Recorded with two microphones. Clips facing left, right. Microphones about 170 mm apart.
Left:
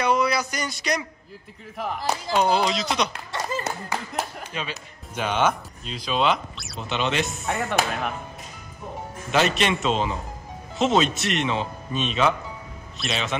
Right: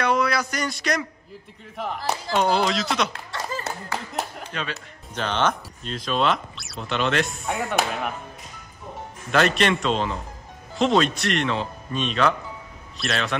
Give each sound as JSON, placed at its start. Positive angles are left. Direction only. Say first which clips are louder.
{"t": 0.0, "sound": "a sound", "louder": "even", "side_deg": 0}
{"t": 1.8, "sound": "speech", "louder": "even", "side_deg": 0}
{"t": 3.1, "sound": "speech", "louder": "left 2 dB", "side_deg": 20}
{"t": 4.5, "sound": "speech", "louder": "right 1 dB", "side_deg": 5}
{"t": 9.3, "sound": "speech", "louder": "right 1 dB", "side_deg": 5}